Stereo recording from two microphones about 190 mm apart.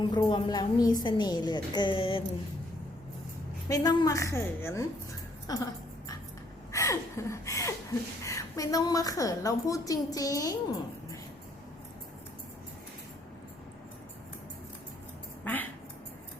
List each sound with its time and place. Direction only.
0.1 s a woman's voice: 25° left (ahead or behind)
3.7 s a woman's voice: 20° left (ahead or behind)
6.7 s a sound: 15° left (ahead or behind)
8.2 s a woman's voice: 15° left (ahead or behind)
15.5 s duck: 10° left (ahead or behind)